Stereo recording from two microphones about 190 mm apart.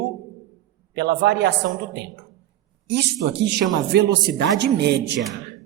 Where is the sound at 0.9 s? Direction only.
60° right (ahead or behind).